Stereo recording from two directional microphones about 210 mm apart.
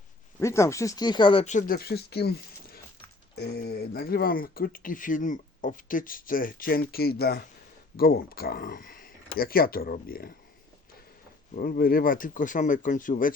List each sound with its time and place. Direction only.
0.3 s speech: 15° left (ahead or behind); by 10.3 s 45° left (ahead or behind)
11.5 s speech: 45° left (ahead or behind)